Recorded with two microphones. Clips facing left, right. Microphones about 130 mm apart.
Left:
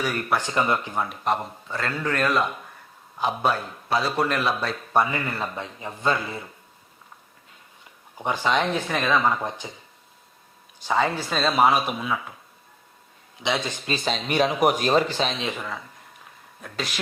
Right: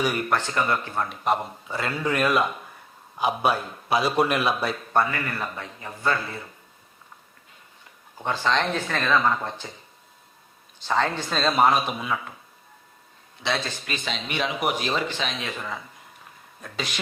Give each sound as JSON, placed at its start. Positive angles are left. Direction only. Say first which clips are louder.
{"t": 0.0, "sound": "a man's voice", "louder": "right 2 dB", "side_deg": -15}
{"t": 0.3, "sound": "speech", "louder": "left 1 dB", "side_deg": 15}
{"t": 1.1, "sound": "a man's voice", "louder": "right 1 dB", "side_deg": -5}
{"t": 4.9, "sound": "a man's voice", "louder": "left 2 dB", "side_deg": 20}
{"t": 8.2, "sound": "speech", "louder": "left 1 dB", "side_deg": 15}
{"t": 10.8, "sound": "speech", "louder": "left 1 dB", "side_deg": 10}
{"t": 13.4, "sound": "speech", "louder": "left 2 dB", "side_deg": 15}
{"t": 13.8, "sound": "speech", "louder": "left 5 dB", "side_deg": 35}
{"t": 15.5, "sound": "speech", "louder": "even", "side_deg": 0}